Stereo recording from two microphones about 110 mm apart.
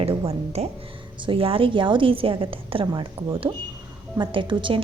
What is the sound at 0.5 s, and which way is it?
Speech, 75° right (ahead or behind).